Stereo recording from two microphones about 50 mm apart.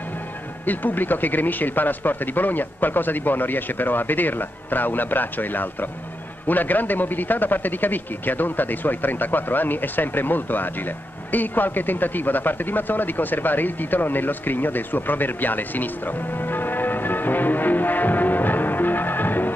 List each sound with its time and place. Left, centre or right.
0.7 s speech: left